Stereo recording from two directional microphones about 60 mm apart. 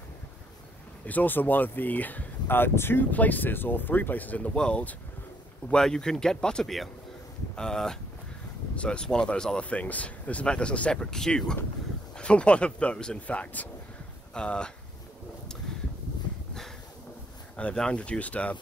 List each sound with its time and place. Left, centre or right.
1.0 s speech: left
17.7 s speech: centre